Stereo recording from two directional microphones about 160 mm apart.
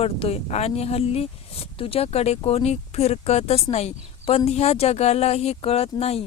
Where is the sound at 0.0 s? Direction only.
40° left (ahead or behind).